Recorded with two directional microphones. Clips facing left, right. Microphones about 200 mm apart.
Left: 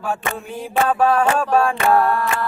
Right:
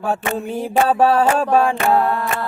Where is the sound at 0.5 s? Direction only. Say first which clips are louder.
Right 2 dB; 25° right (ahead or behind).